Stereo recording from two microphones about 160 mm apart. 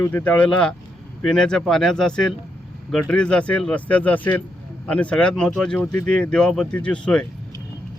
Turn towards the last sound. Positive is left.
turn(degrees=5)  # may be behind; listen again after turning